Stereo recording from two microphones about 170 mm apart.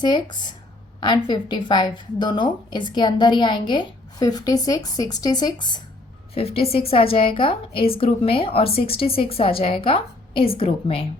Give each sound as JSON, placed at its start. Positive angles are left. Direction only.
{"t": 0.0, "sound": "a woman's voice", "side_deg": 25}